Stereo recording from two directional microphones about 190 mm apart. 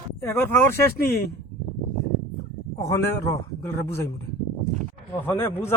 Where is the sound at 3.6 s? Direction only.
15° left (ahead or behind).